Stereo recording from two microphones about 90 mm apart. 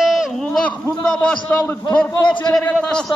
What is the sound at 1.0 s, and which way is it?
A man's voice, 10° left (ahead or behind).